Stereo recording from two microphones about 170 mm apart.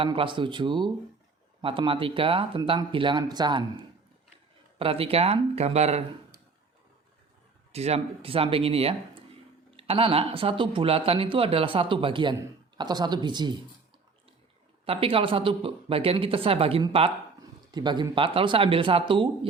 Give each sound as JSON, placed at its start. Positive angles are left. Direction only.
{"t": 0.0, "sound": "speech", "side_deg": -30}
{"t": 7.7, "sound": "speech", "side_deg": -40}
{"t": 14.8, "sound": "speech", "side_deg": -35}